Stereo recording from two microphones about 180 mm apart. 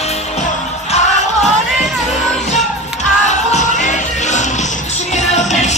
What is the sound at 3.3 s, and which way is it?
Music, 40° left (ahead or behind).